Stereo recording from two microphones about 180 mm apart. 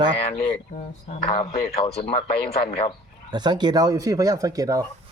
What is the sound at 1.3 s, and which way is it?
Speech, 35° left (ahead or behind).